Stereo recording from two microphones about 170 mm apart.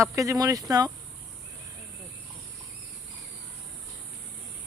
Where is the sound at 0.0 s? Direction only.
20° right (ahead or behind).